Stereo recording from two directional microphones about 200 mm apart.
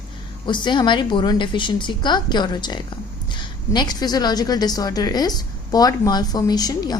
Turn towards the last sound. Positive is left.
turn(degrees=20)  # may be behind; listen again after turning